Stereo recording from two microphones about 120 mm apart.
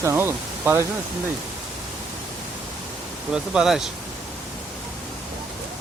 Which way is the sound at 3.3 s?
5° right (ahead or behind).